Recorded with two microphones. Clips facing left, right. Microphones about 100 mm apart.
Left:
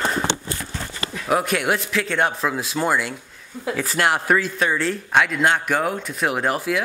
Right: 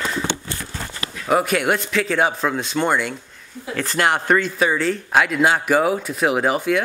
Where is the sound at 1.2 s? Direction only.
Centre (ahead or behind).